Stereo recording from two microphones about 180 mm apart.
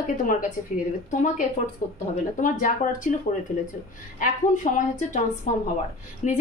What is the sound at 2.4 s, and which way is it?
Speech, 45° left (ahead or behind).